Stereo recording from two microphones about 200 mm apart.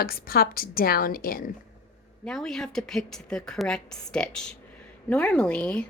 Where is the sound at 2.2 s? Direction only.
5° left (ahead or behind).